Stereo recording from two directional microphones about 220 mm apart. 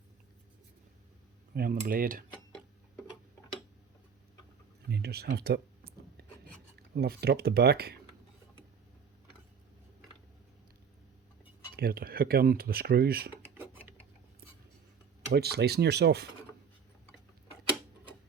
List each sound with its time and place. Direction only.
1.5 s cutlery: 40° right (ahead or behind)
4.9 s a sound: 45° right (ahead or behind)
6.7 s speech: 45° right (ahead or behind)
11.8 s speech: 45° right (ahead or behind)
15.3 s speech: 45° right (ahead or behind)